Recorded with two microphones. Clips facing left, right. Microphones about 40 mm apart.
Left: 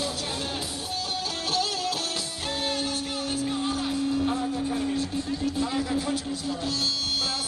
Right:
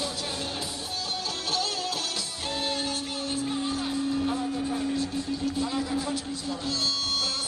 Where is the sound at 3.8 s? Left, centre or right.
Centre.